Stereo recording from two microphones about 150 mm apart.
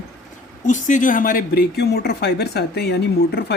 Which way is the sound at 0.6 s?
55° left (ahead or behind).